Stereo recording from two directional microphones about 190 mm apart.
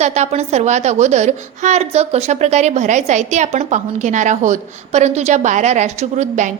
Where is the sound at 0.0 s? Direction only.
35° right (ahead or behind).